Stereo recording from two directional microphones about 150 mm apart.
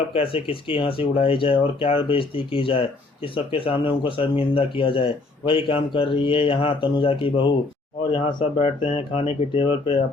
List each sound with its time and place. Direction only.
0.1 s speech: 40° left (ahead or behind)